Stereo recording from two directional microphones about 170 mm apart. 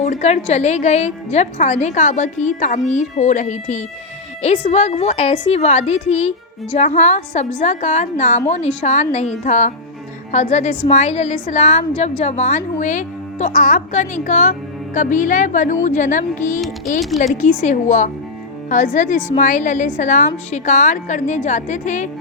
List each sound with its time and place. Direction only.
0.0 s a woman's voice: 45° left (ahead or behind)
16.6 s music: centre (ahead or behind)
17.3 s a woman's voice: 45° left (ahead or behind)